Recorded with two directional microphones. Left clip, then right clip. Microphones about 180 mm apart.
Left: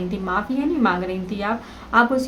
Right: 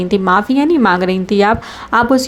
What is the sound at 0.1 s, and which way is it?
Speech, 45° right (ahead or behind).